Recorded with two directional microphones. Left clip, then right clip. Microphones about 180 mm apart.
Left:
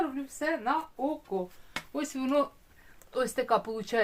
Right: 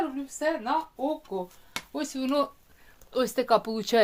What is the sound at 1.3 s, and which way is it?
Speech, 30° right (ahead or behind).